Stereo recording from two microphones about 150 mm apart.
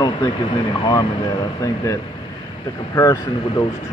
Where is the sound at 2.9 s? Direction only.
20° left (ahead or behind).